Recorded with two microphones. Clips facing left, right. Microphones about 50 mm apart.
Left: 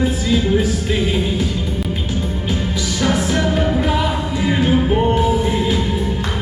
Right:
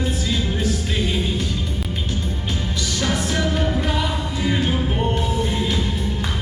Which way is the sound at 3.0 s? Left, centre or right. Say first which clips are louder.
Left 5 dB; centre.